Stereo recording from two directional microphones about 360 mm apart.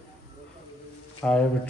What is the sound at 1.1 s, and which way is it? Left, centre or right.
Speech, centre.